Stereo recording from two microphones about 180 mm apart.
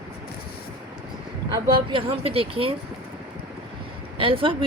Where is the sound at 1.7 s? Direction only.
30° right (ahead or behind).